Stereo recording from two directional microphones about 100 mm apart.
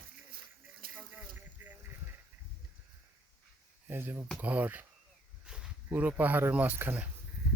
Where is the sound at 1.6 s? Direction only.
20° right (ahead or behind).